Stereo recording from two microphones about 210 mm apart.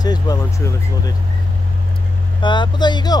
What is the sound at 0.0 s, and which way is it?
Speech, 20° left (ahead or behind).